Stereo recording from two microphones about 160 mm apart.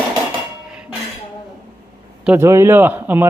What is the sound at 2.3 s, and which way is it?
Speech, 15° right (ahead or behind).